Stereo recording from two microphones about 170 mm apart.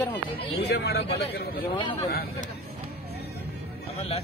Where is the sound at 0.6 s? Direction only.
85° left.